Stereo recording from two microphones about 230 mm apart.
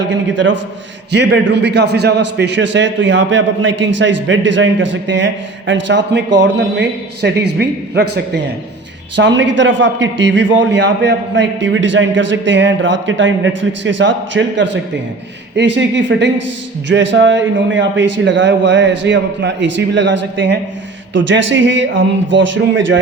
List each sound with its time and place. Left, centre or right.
0.1 s a man's voice: right